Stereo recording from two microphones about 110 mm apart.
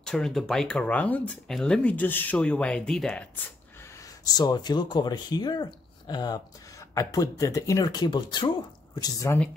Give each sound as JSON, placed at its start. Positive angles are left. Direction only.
{"t": 0.0, "sound": "speech", "side_deg": 5}
{"t": 4.3, "sound": "speech", "side_deg": 35}
{"t": 9.3, "sound": "speech", "side_deg": 25}